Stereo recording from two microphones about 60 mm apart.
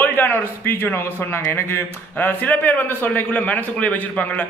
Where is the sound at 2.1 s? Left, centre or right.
Left.